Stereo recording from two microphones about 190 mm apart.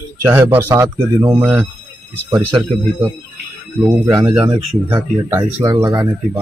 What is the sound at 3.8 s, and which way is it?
Speech, 15° right (ahead or behind).